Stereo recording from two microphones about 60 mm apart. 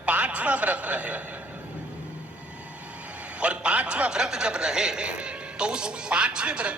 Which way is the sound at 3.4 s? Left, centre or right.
Centre.